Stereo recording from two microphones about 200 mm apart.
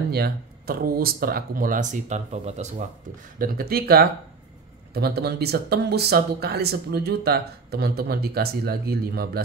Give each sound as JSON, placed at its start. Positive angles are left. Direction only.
{"t": 0.1, "sound": "speech", "side_deg": -50}
{"t": 3.3, "sound": "speech", "side_deg": -45}